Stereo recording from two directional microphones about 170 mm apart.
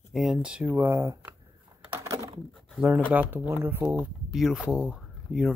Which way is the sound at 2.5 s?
5° right (ahead or behind).